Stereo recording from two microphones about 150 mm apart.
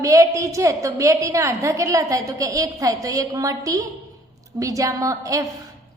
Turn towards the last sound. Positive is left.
turn(degrees=-20)  # may be behind; listen again after turning